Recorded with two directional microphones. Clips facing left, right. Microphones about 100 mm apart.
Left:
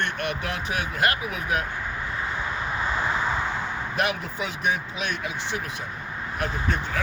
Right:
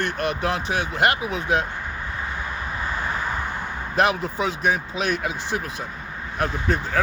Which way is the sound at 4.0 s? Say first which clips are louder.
Right 7 dB; 35° right (ahead or behind).